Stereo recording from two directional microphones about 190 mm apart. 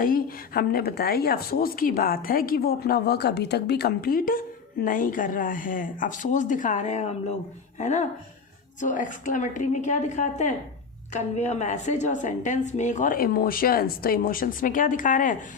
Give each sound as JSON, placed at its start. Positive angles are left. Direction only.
{"t": 0.0, "sound": "a woman's voice", "side_deg": 50}